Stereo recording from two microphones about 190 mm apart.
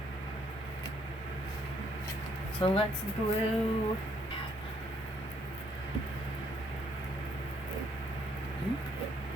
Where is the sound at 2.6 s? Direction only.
30° left (ahead or behind).